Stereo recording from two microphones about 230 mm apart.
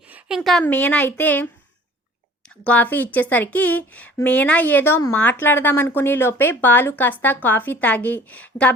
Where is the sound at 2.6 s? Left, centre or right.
Centre.